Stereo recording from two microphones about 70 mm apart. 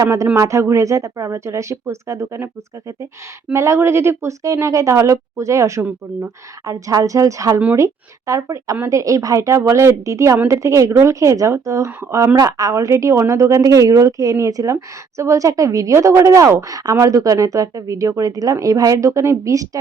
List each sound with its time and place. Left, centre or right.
0.0 s speech: right
3.5 s speech: right
5.8 s speech: right
6.7 s a woman's voice: right
12.4 s a woman's voice: right
12.7 s a woman's voice: right